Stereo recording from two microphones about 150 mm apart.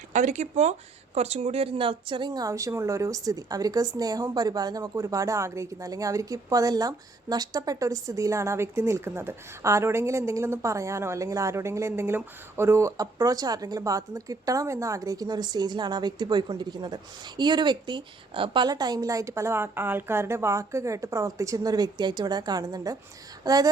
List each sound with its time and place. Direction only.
0.1 s a woman's voice: 50° right (ahead or behind); by 23.6 s 25° right (ahead or behind)